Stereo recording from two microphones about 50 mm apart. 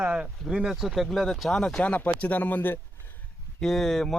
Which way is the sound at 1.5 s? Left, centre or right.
Centre.